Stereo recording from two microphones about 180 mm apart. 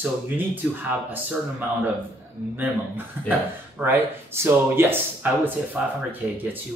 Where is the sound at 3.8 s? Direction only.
15° right (ahead or behind).